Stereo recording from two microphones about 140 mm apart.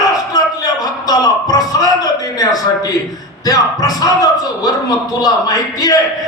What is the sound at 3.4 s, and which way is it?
A man's voice, 25° left (ahead or behind).